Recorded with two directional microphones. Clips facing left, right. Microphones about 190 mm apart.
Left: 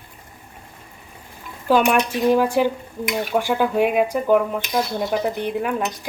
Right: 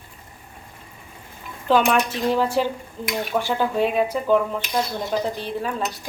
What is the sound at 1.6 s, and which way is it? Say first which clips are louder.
Speech: left 1 dB; 10° left (ahead or behind).